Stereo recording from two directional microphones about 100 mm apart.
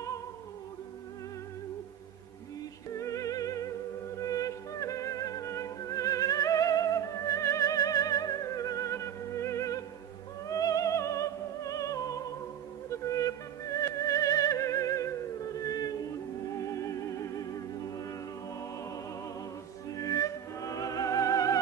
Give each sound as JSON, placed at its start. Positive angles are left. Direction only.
{"t": 2.9, "sound": "music", "side_deg": 30}
{"t": 19.9, "sound": "music", "side_deg": 35}